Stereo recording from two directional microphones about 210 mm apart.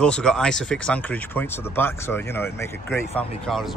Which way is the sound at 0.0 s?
5° left (ahead or behind).